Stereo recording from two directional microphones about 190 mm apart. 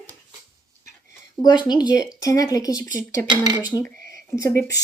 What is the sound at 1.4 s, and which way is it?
Speech, 20° left (ahead or behind).